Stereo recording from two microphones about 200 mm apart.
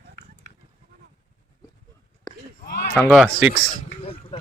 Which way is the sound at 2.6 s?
50° left (ahead or behind).